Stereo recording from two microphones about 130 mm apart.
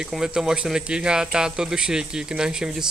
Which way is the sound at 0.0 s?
5° right (ahead or behind).